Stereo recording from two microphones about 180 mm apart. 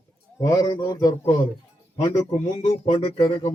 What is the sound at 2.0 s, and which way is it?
Speech, 30° left (ahead or behind).